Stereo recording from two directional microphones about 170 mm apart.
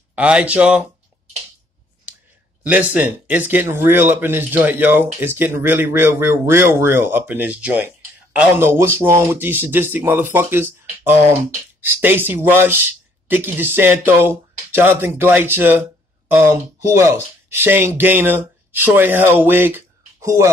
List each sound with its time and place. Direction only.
0.1 s speech: 5° right (ahead or behind)
2.6 s speech: 10° right (ahead or behind)
20.2 s a sound: 15° right (ahead or behind)